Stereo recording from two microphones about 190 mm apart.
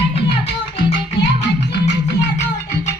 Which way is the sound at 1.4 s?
65° left (ahead or behind).